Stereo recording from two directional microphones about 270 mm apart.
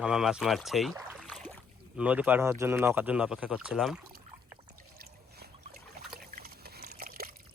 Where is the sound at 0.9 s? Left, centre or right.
Centre.